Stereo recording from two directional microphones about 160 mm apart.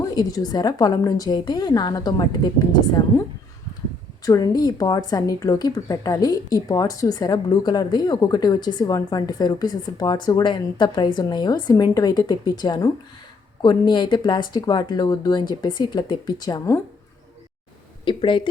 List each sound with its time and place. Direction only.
0.0 s a woman's voice: 25° left (ahead or behind)
4.3 s a woman's voice: 25° left (ahead or behind)
18.0 s speech: 30° left (ahead or behind)